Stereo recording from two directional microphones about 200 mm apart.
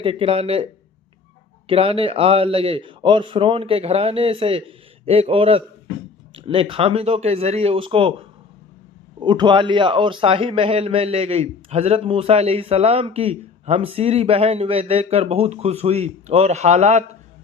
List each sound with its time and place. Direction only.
0.0 s a man's voice: 25° right (ahead or behind)
9.2 s a man's voice: 25° right (ahead or behind)